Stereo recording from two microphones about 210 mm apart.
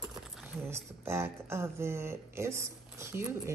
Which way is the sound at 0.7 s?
10° right (ahead or behind).